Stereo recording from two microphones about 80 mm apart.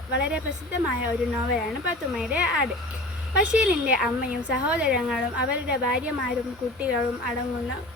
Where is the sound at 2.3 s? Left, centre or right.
Centre.